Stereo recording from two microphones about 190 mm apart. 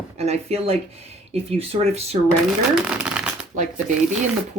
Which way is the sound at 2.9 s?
5° right (ahead or behind).